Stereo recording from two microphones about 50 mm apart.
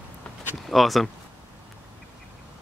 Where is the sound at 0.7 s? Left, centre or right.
Centre.